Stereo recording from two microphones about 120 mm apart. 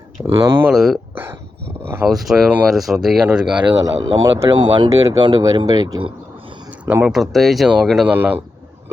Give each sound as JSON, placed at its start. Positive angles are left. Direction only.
{"t": 0.3, "sound": "speech", "side_deg": -20}
{"t": 0.7, "sound": "speech", "side_deg": 0}
{"t": 1.1, "sound": "speech", "side_deg": -20}
{"t": 2.1, "sound": "speech", "side_deg": 0}
{"t": 3.8, "sound": "speech", "side_deg": -30}
{"t": 6.7, "sound": "a sound", "side_deg": -15}
{"t": 7.1, "sound": "speech", "side_deg": 0}
{"t": 8.0, "sound": "speech", "side_deg": -15}